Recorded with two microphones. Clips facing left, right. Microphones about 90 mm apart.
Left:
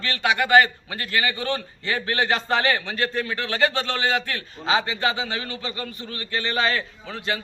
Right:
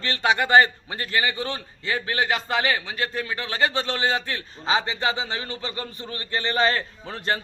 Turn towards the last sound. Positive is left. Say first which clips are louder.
# right 1 dB
turn(degrees=-45)  # may be behind; listen again after turning